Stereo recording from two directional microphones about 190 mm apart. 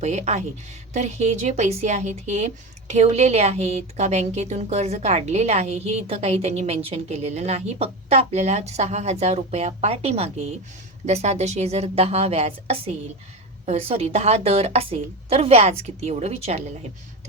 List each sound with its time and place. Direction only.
0.0 s a woman's voice: 35° right (ahead or behind)